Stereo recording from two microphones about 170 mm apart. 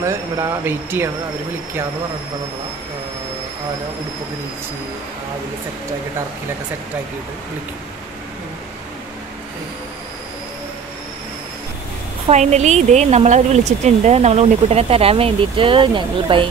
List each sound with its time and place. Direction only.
0.0 s speech: 15° right (ahead or behind)
12.3 s speech: 40° right (ahead or behind)